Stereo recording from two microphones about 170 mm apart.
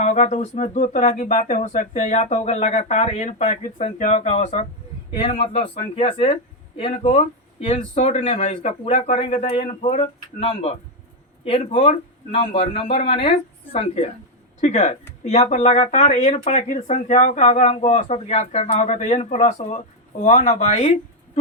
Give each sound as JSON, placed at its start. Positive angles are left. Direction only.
{"t": 0.0, "sound": "speech", "side_deg": 45}